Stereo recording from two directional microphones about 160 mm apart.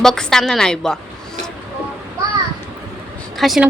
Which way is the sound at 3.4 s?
Centre (ahead or behind).